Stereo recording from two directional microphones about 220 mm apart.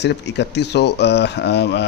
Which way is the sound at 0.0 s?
50° left (ahead or behind).